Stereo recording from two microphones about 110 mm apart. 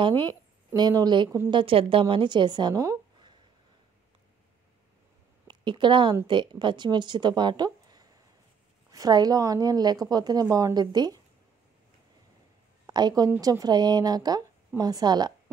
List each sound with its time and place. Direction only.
0.1 s a woman's voice: 20° left (ahead or behind)
0.7 s a woman's voice: 40° right (ahead or behind)
1.5 s speech: 50° right (ahead or behind)
5.5 s a woman's voice: 45° right (ahead or behind)
12.8 s a woman's voice: 35° right (ahead or behind)